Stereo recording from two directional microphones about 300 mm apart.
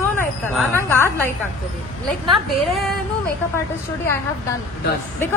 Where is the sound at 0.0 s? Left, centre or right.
Centre.